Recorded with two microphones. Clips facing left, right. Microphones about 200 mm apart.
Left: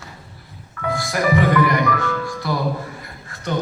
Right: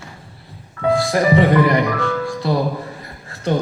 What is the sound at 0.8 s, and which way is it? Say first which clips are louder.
Music: right 5 dB; 30° right (ahead or behind).